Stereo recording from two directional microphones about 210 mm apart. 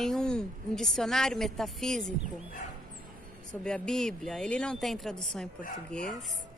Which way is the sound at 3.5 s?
5° left (ahead or behind).